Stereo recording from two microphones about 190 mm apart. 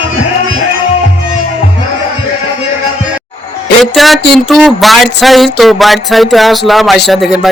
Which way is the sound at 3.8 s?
Centre (ahead or behind).